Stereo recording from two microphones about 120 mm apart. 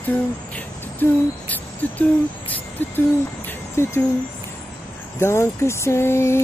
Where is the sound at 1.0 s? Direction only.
15° left (ahead or behind).